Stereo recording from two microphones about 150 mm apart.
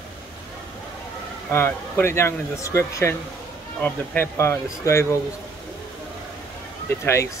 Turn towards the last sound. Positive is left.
turn(degrees=15)  # may be behind; listen again after turning